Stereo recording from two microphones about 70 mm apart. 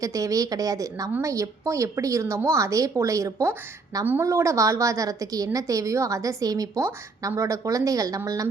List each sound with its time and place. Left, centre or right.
0.0 s a woman's voice: right
7.2 s a woman's voice: right